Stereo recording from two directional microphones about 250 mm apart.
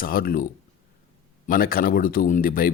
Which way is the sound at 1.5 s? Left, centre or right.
Left.